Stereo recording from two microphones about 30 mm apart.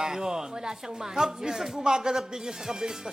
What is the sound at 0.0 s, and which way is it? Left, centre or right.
Speech, right.